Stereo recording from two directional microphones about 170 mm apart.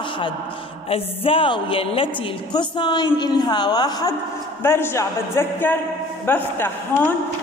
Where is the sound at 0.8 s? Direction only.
35° left (ahead or behind); by 6.7 s 10° left (ahead or behind).